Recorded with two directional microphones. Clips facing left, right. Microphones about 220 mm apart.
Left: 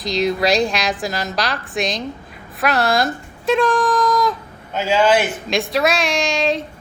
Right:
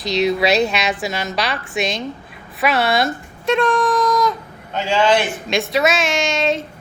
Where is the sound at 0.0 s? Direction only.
Centre (ahead or behind).